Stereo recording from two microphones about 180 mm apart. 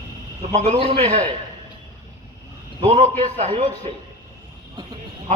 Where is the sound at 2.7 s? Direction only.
35° right (ahead or behind).